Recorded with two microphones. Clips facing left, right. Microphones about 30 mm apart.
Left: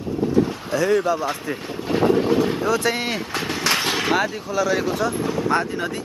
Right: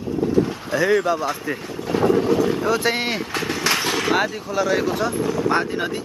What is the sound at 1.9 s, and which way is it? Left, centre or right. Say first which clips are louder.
Train: even; centre.